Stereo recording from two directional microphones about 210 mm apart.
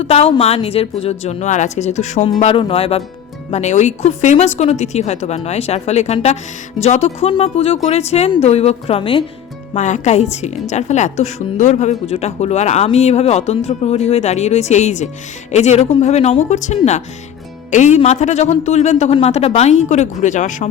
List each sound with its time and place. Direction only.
0.0 s a woman's voice: 30° left (ahead or behind)